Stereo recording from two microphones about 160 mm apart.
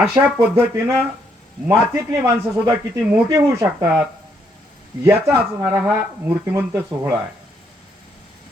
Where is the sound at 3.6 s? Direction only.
15° right (ahead or behind).